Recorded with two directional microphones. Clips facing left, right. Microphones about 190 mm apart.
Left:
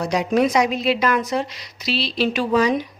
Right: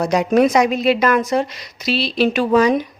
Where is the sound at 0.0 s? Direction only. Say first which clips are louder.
Right 4 dB; 50° right (ahead or behind).